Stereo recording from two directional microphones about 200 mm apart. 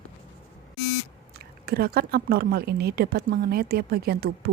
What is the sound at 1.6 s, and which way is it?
Speech, 50° right (ahead or behind).